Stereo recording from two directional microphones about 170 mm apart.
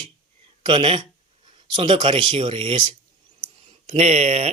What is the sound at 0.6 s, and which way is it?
Speech, 30° right (ahead or behind).